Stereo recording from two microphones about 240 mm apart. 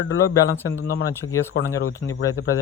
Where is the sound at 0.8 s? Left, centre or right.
Left.